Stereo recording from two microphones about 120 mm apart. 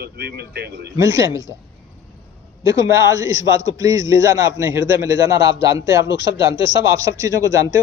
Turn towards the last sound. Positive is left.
turn(degrees=-25)  # may be behind; listen again after turning